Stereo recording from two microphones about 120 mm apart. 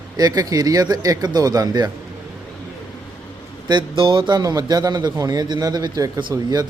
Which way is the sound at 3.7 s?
45° right (ahead or behind).